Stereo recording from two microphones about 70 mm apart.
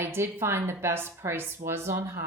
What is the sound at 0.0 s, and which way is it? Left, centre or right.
Speech, right.